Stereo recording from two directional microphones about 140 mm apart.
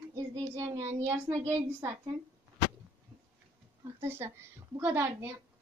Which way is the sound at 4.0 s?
15° right (ahead or behind).